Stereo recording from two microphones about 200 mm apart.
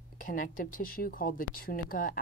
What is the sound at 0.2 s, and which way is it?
Speech, 45° left (ahead or behind).